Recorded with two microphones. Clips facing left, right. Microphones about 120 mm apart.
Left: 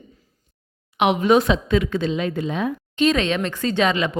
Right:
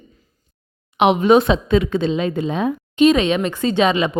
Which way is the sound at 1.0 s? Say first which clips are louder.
Right 3 dB; 25° right (ahead or behind).